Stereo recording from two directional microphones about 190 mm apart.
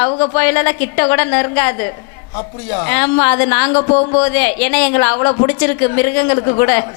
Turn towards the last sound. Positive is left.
turn(degrees=20)  # may be behind; listen again after turning